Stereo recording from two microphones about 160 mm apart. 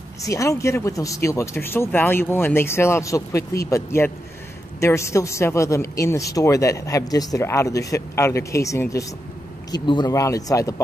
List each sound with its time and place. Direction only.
0.2 s speech: 20° left (ahead or behind)